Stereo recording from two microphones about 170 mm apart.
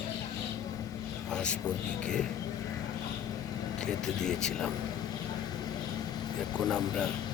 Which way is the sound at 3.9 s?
5° left (ahead or behind).